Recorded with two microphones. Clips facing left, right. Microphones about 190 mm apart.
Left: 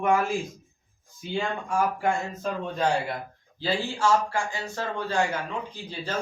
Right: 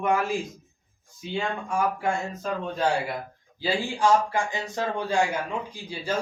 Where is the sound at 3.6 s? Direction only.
15° right (ahead or behind).